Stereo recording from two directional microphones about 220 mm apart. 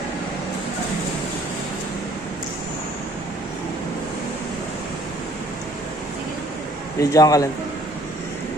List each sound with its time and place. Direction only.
7.0 s a man's voice: 15° left (ahead or behind)